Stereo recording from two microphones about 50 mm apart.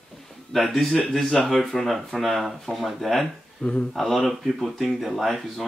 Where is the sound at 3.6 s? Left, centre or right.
Centre.